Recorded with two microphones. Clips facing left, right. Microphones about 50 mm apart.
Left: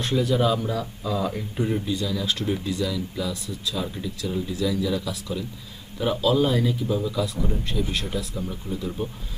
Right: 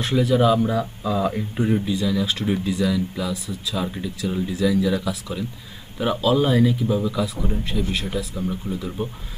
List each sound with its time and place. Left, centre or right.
0.0 s speech: centre